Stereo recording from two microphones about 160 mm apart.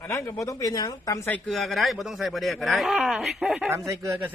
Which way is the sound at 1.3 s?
10° left (ahead or behind).